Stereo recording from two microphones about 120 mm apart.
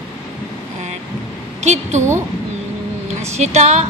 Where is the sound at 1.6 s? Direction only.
75° right (ahead or behind).